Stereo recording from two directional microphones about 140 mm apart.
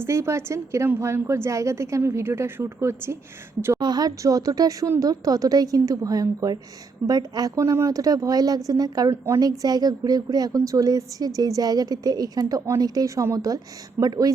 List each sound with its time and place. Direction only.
0.0 s speech: 20° right (ahead or behind)
3.8 s speech: 30° right (ahead or behind)